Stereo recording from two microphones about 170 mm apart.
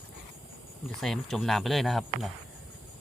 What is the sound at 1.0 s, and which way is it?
Speech, centre (ahead or behind).